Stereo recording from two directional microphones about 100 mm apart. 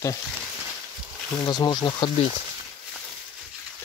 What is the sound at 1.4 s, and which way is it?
Speech, 45° left (ahead or behind).